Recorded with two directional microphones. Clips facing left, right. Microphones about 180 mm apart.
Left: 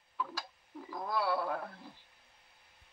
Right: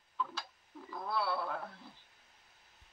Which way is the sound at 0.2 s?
10° left (ahead or behind).